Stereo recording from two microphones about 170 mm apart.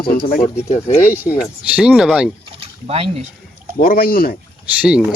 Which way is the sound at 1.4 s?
5° right (ahead or behind).